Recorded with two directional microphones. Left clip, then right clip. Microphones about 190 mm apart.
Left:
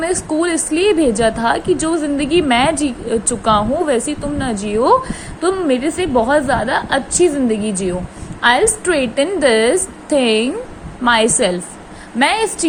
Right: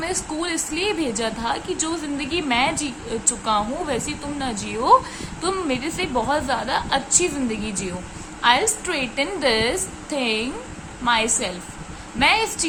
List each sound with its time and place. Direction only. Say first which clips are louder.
0.0 s a woman's voice: left 9 dB; 20° left (ahead or behind)